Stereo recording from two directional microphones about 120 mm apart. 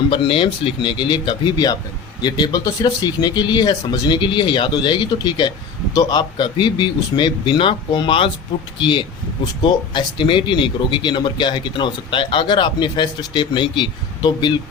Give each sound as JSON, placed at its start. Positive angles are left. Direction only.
{"t": 0.1, "sound": "speech", "side_deg": 45}